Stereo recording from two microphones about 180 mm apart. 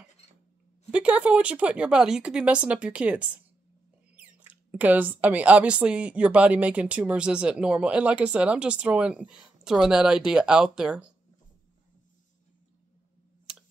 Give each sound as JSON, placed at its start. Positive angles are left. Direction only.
{"t": 0.9, "sound": "speech", "side_deg": -5}